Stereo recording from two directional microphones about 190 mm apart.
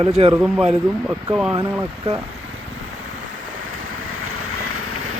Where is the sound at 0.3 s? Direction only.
5° right (ahead or behind).